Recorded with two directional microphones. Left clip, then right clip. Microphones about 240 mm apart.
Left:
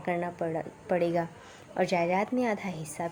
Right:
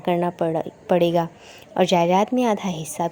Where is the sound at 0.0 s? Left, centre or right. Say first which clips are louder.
Right 9 dB; right.